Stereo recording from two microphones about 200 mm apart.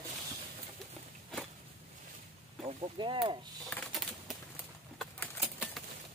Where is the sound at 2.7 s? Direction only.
25° right (ahead or behind).